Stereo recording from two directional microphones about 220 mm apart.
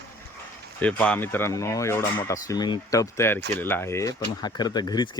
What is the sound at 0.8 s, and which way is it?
Speech, 5° left (ahead or behind).